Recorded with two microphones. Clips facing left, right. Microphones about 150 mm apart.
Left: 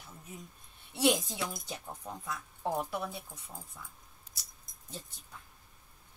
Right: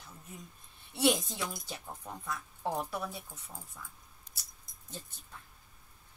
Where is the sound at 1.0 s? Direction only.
5° left (ahead or behind).